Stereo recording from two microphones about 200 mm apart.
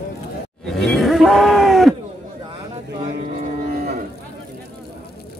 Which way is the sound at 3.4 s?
40° right (ahead or behind).